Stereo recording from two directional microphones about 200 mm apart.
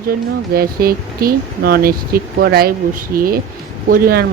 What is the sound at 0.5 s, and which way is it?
Speech, 50° right (ahead or behind).